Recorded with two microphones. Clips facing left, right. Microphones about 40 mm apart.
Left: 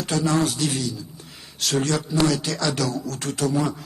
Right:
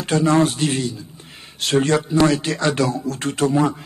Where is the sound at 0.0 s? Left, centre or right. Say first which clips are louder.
Right 5 dB; right.